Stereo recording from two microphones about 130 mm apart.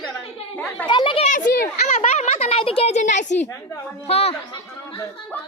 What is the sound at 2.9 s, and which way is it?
Speech, 70° left (ahead or behind).